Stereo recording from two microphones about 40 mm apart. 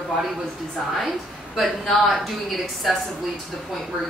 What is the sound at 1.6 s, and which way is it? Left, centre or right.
A woman's voice, centre.